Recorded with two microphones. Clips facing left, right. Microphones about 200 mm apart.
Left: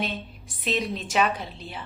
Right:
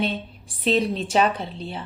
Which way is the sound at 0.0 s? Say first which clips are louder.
Right 5 dB; 30° right (ahead or behind).